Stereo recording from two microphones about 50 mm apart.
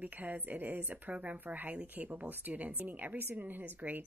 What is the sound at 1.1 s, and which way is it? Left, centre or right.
Speech, right.